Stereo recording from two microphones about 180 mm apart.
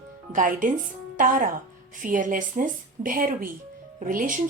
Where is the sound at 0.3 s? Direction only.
50° right (ahead or behind).